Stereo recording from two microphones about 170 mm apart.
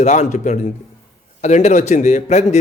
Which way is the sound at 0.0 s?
45° left (ahead or behind).